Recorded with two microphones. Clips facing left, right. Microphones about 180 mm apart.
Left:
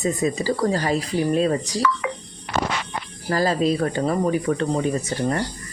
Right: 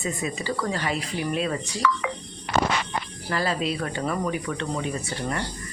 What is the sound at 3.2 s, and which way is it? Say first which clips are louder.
Speech: left 7 dB; 40° left (ahead or behind).